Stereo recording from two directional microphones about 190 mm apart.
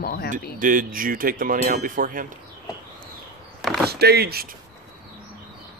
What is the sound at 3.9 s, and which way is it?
Speech, 55° right (ahead or behind).